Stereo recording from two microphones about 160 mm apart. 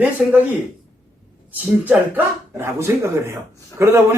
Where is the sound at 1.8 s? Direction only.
10° right (ahead or behind).